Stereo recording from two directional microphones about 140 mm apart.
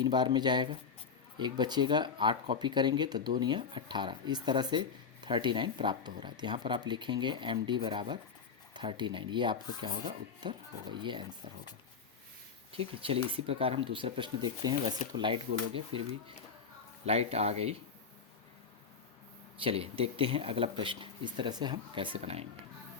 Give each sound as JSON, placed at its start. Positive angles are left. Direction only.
{"t": 0.0, "sound": "speech", "side_deg": -30}
{"t": 12.7, "sound": "speech", "side_deg": -40}
{"t": 17.1, "sound": "speech", "side_deg": -50}
{"t": 19.6, "sound": "speech", "side_deg": -45}
{"t": 22.2, "sound": "speech", "side_deg": -50}